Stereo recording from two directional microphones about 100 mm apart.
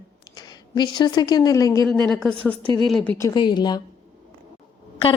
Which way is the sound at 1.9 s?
5° left (ahead or behind).